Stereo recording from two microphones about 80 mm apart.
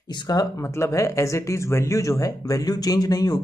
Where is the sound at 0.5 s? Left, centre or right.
Left.